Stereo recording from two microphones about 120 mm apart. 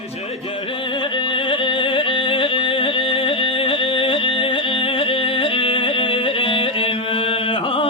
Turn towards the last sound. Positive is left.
turn(degrees=45)  # may be behind; listen again after turning